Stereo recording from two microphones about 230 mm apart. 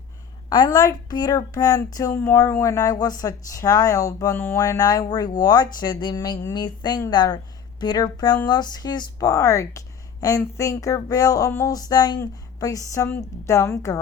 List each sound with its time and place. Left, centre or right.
0.5 s a woman's voice: centre